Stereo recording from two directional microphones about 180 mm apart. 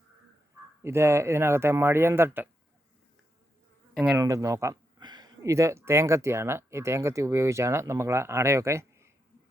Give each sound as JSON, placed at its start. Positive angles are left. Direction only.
{"t": 0.8, "sound": "speech", "side_deg": -15}
{"t": 3.9, "sound": "speech", "side_deg": -5}
{"t": 4.2, "sound": "speech", "side_deg": -20}